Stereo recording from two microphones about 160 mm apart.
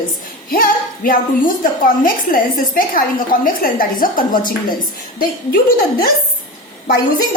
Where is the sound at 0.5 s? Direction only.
60° left (ahead or behind).